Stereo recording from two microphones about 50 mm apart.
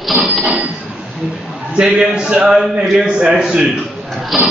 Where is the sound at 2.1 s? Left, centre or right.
Centre.